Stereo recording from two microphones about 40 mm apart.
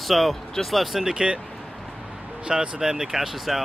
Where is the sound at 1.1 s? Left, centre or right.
Right.